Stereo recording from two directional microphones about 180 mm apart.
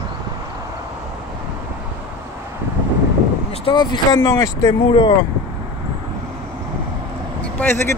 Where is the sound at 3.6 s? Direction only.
25° left (ahead or behind).